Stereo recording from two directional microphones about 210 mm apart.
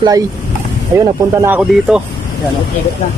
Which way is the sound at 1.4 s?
5° right (ahead or behind).